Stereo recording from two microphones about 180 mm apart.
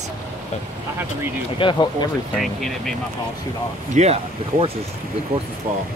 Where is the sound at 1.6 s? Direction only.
25° left (ahead or behind).